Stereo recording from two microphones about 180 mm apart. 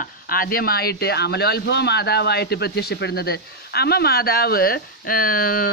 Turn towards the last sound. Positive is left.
turn(degrees=55)  # may be behind; listen again after turning